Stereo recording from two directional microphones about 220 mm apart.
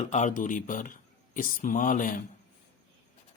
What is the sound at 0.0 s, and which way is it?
Speech, 35° left (ahead or behind).